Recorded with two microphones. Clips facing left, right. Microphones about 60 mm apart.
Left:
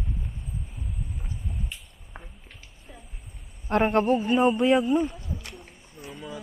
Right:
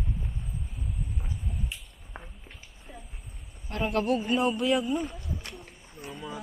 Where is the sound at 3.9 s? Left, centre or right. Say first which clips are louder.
Even; left.